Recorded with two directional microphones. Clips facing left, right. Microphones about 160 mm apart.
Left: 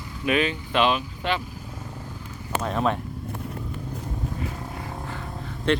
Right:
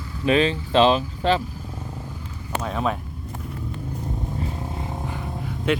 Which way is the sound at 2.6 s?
Centre (ahead or behind).